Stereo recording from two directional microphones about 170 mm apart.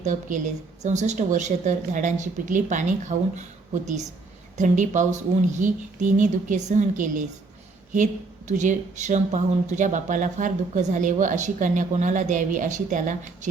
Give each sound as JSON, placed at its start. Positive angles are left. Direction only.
{"t": 0.0, "sound": "speech", "side_deg": -45}